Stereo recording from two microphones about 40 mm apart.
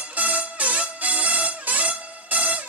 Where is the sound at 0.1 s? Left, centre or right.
Right.